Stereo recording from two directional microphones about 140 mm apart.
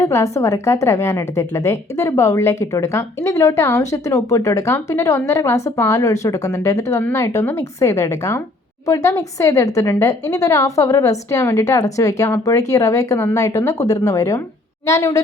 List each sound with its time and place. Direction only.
0.0 s a woman's voice: 20° left (ahead or behind)